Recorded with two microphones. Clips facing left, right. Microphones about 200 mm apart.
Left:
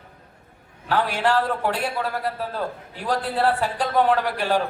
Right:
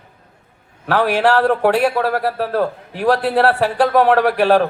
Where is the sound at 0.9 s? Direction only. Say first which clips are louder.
Right 6 dB; 70° right (ahead or behind).